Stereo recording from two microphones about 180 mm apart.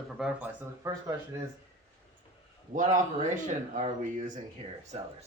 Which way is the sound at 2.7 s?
45° right (ahead or behind).